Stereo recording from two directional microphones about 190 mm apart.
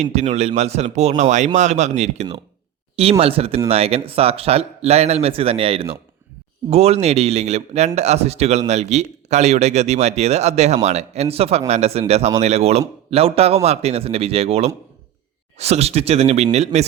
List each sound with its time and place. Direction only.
0.0 s a man's voice: 35° right (ahead or behind)